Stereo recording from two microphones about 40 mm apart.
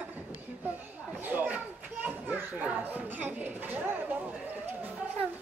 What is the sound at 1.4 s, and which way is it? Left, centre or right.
Children playing, right.